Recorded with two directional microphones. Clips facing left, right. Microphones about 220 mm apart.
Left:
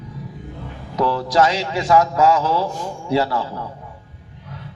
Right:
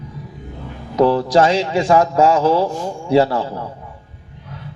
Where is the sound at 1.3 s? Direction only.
25° right (ahead or behind).